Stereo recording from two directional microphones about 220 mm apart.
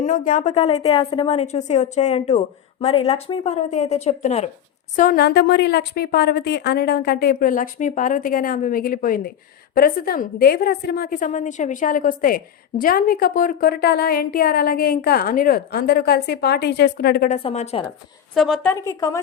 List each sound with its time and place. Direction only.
0.0 s a woman's voice: 35° left (ahead or behind)
4.9 s a woman's voice: 40° left (ahead or behind)
17.3 s speech: 30° left (ahead or behind)
18.3 s a woman's voice: centre (ahead or behind)